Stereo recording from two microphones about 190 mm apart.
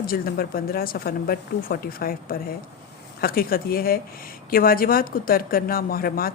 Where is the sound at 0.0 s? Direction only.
50° left (ahead or behind).